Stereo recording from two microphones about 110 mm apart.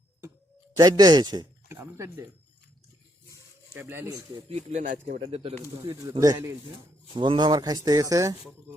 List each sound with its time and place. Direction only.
0.8 s speech: 35° right (ahead or behind)
1.7 s speech: 25° right (ahead or behind)
3.8 s speech: 20° right (ahead or behind)
4.4 s speech: 85° right
5.2 s speech: 60° right (ahead or behind)
5.8 s speech: 30° right (ahead or behind)
7.1 s speech: 45° right (ahead or behind)